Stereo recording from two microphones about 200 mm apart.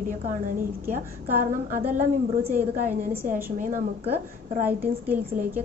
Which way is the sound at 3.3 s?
40° right (ahead or behind).